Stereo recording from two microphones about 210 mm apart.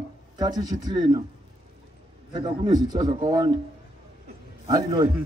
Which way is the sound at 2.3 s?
20° right (ahead or behind).